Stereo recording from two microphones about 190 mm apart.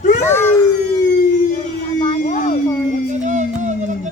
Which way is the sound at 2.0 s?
35° left (ahead or behind).